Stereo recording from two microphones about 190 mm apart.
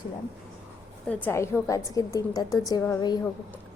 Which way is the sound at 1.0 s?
10° left (ahead or behind).